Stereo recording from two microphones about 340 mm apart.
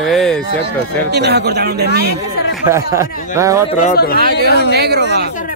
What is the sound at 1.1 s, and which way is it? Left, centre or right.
Speech, right.